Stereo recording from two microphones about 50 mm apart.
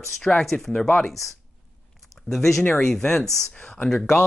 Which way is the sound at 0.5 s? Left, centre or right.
Centre.